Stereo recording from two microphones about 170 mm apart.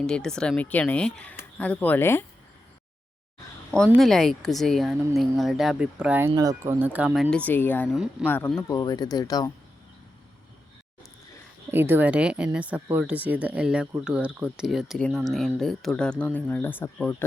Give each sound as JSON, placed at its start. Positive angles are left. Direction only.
{"t": 0.0, "sound": "speech", "side_deg": 5}
{"t": 3.9, "sound": "speech", "side_deg": 0}
{"t": 7.9, "sound": "speech", "side_deg": -5}
{"t": 8.3, "sound": "speech", "side_deg": 10}
{"t": 11.7, "sound": "speech", "side_deg": -10}